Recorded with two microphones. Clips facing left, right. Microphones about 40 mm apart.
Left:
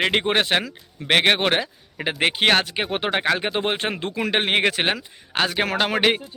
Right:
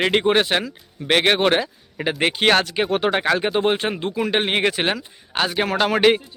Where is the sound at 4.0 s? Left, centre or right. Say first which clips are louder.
Right 3 dB; left.